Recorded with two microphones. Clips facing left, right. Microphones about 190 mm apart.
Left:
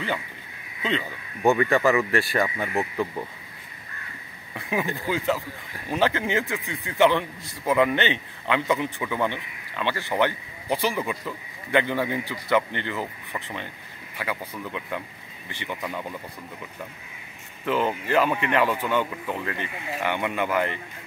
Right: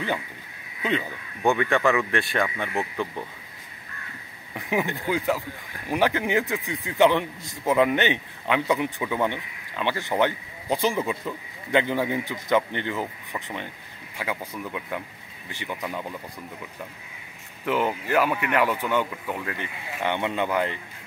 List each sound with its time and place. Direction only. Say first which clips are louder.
1.4 s speech: left 2 dB; 5° left (ahead or behind)
4.6 s a man's voice: right 1 dB; 20° right (ahead or behind)
17.6 s a man's voice: even; 15° right (ahead or behind)